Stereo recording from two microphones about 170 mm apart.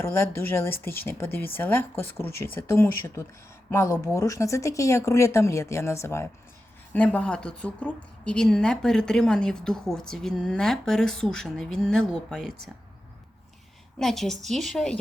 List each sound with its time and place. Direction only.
0.0 s speech: 15° left (ahead or behind)
14.0 s speech: centre (ahead or behind)